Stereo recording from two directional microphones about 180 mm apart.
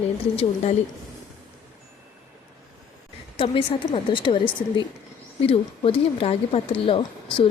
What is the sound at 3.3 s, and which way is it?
Speech, 30° left (ahead or behind).